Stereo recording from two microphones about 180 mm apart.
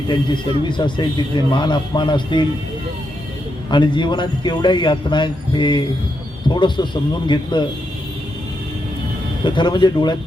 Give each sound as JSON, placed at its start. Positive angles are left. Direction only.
{"t": 0.6, "sound": "a man's voice", "side_deg": 25}
{"t": 3.7, "sound": "a man's voice", "side_deg": 25}
{"t": 9.4, "sound": "a man's voice", "side_deg": 25}